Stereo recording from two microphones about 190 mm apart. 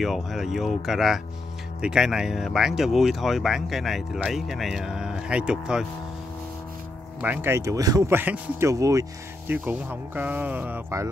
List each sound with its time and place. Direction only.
0.0 s speech: centre (ahead or behind)
7.2 s speech: 10° right (ahead or behind)